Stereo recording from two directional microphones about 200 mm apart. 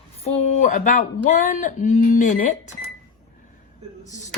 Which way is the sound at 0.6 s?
40° left (ahead or behind).